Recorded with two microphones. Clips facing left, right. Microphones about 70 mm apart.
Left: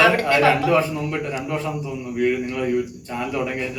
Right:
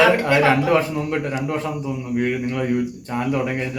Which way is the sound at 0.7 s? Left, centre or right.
Right.